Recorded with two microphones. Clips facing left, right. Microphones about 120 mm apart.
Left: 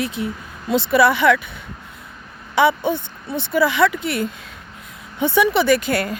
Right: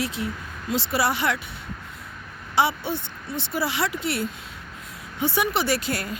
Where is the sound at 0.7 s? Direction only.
55° left (ahead or behind).